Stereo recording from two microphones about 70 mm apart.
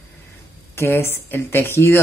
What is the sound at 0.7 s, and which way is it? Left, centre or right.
Speech, left.